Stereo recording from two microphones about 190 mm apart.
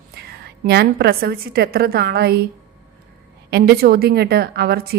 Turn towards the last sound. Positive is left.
turn(degrees=-55)  # may be behind; listen again after turning